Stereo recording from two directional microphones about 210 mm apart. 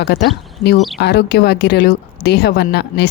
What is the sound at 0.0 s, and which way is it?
A woman's voice, 50° left (ahead or behind).